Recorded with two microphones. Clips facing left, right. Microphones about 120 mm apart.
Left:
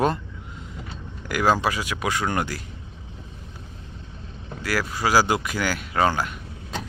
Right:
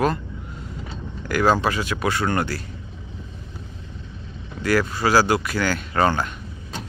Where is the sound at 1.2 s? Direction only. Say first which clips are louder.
Right 2 dB; 10° left (ahead or behind).